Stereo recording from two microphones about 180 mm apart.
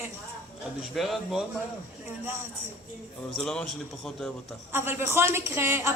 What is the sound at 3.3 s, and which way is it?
Speech, 5° left (ahead or behind).